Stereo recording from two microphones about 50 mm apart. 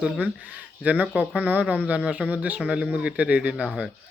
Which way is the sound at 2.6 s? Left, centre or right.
Right.